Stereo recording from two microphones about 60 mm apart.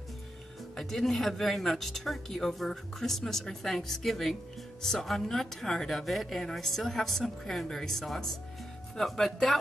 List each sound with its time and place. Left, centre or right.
0.7 s speech: centre